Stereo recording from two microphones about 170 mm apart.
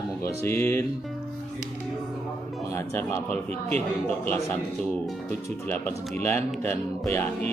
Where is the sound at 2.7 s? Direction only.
15° left (ahead or behind).